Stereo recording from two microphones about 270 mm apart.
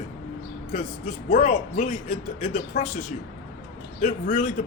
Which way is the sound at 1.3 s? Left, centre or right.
Left.